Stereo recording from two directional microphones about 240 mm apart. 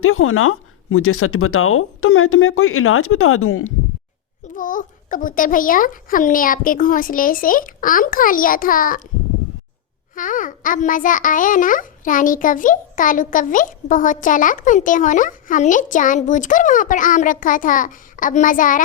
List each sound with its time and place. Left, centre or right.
0.0 s speech: left
4.5 s a child's voice: left
10.2 s a child's voice: left